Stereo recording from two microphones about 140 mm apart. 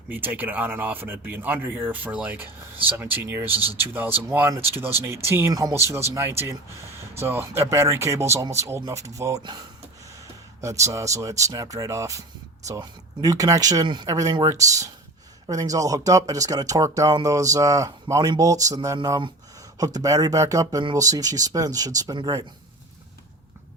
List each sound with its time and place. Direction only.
0.1 s speech: 15° right (ahead or behind)
10.6 s speech: 20° right (ahead or behind)
13.2 s speech: 25° right (ahead or behind)